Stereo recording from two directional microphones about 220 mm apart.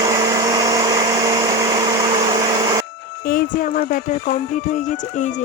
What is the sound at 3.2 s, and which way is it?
Speech, 40° left (ahead or behind).